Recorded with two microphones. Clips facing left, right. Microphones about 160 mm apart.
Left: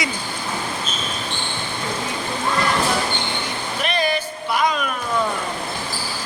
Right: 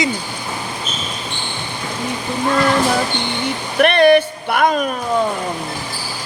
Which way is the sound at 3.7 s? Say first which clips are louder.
Right 12 dB; 65° right (ahead or behind).